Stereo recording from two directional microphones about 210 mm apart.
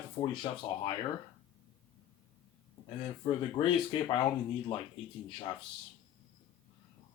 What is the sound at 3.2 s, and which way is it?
Speech, 20° left (ahead or behind).